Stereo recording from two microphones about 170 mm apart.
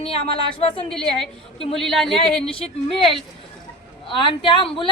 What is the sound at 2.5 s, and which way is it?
A woman's voice, 35° left (ahead or behind).